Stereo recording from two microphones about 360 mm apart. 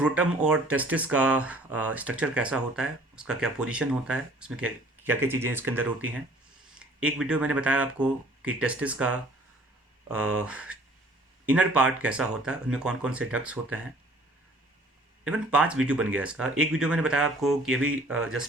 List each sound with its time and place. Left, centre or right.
0.0 s speech: centre
10.3 s speech: centre
15.2 s speech: centre
17.8 s speech: right